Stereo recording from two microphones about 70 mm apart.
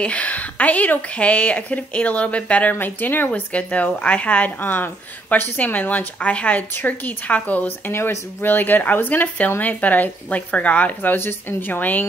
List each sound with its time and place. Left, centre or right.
0.0 s speech: centre
7.9 s speech: left